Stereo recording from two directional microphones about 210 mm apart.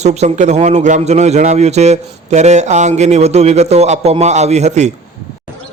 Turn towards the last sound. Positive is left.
turn(degrees=-35)  # may be behind; listen again after turning